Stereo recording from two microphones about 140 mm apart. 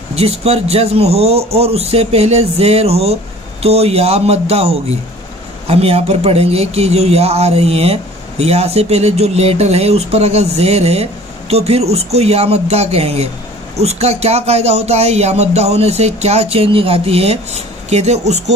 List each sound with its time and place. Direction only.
0.1 s speech: 45° right (ahead or behind)